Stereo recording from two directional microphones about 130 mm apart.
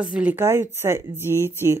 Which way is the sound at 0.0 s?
10° right (ahead or behind).